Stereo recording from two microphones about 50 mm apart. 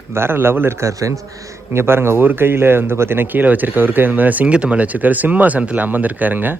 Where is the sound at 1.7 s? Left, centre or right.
Right.